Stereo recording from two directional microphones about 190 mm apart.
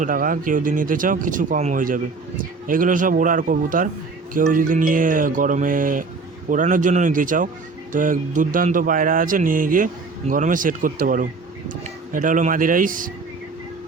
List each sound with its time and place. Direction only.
0.0 s speech: 45° right (ahead or behind)